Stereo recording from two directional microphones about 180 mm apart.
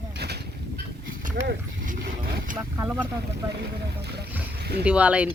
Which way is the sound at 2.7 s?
10° right (ahead or behind).